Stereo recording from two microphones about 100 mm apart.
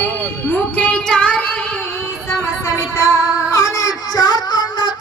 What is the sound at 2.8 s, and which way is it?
Child singing, 30° left (ahead or behind).